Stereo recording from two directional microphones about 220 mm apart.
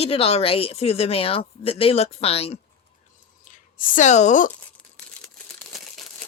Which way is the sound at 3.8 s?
35° left (ahead or behind).